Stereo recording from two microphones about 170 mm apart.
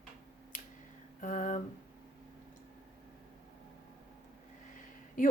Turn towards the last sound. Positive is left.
turn(degrees=50)  # may be behind; listen again after turning